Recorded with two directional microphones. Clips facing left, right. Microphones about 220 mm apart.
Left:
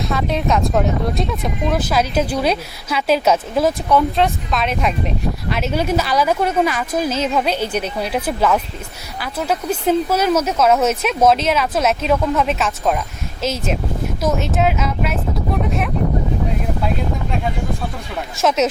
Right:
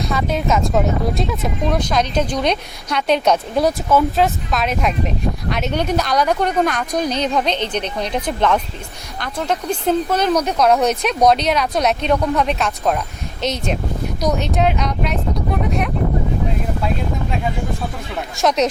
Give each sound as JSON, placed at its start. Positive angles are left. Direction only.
{"t": 0.0, "sound": "speech", "side_deg": 0}
{"t": 18.3, "sound": "speech", "side_deg": 5}